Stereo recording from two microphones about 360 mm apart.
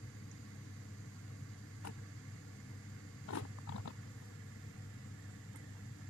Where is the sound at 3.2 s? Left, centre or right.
Left.